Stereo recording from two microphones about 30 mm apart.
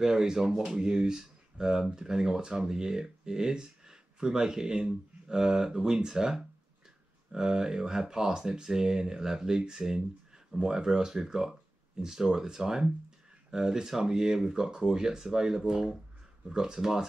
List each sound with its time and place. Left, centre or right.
0.0 s speech: centre